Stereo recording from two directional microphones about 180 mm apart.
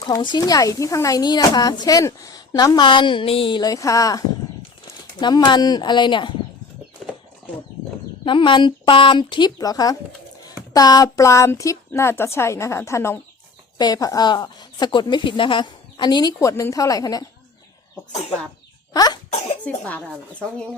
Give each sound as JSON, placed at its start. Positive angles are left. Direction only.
{"t": 0.0, "sound": "speech", "side_deg": 25}
{"t": 5.5, "sound": "speech", "side_deg": 25}
{"t": 8.2, "sound": "a woman's voice", "side_deg": 25}
{"t": 18.9, "sound": "cough", "side_deg": 20}
{"t": 19.3, "sound": "cough", "side_deg": 40}
{"t": 19.6, "sound": "a woman's voice", "side_deg": 10}